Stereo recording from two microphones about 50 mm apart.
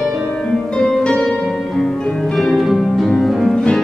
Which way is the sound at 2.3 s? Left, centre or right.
Centre.